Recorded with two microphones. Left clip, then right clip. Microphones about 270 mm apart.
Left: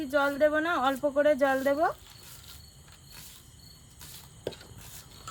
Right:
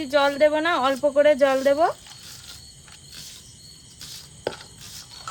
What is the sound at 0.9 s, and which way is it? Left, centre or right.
Speech, right.